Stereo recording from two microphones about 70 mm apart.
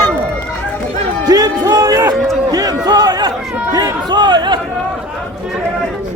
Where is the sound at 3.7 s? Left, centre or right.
Right.